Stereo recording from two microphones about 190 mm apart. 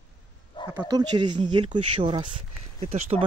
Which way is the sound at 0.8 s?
20° right (ahead or behind).